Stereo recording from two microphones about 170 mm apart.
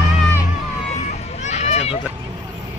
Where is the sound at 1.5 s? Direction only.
40° left (ahead or behind).